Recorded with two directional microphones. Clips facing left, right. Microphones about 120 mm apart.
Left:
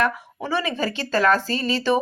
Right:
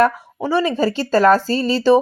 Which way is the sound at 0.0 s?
30° right (ahead or behind).